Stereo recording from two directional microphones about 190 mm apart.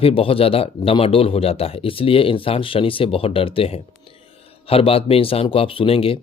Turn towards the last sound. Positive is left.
turn(degrees=30)  # may be behind; listen again after turning